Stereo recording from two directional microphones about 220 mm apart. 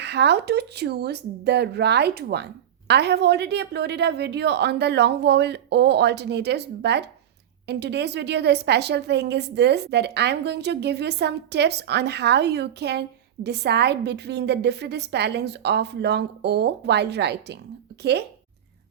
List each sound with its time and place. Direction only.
0.0 s a woman's voice: 50° right (ahead or behind)